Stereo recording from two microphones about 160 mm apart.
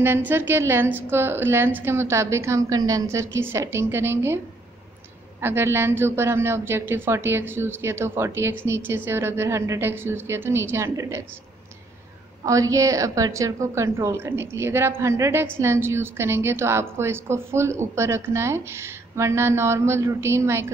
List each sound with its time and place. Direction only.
0.0 s a woman's voice: 15° right (ahead or behind)
5.4 s a woman's voice: 15° right (ahead or behind)
12.4 s a woman's voice: 20° right (ahead or behind)